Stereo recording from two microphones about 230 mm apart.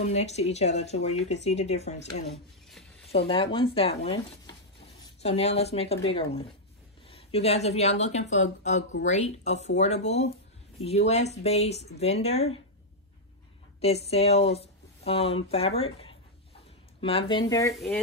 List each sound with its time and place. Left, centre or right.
0.0 s speech: left
3.1 s speech: left
13.7 s speech: left
17.7 s speech: centre